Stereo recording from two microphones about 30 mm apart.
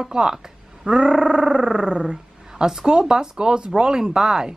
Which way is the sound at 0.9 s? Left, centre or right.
Right.